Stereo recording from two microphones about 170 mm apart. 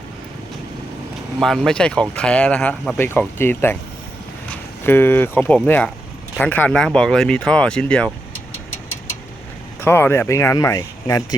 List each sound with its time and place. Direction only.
1.4 s speech: 5° left (ahead or behind)
9.8 s speech: 15° left (ahead or behind)